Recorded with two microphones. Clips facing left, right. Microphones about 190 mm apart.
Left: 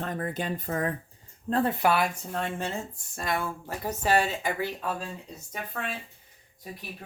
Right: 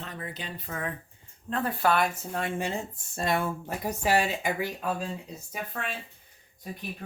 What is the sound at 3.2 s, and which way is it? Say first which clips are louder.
Speech: right 3 dB; 25° right (ahead or behind).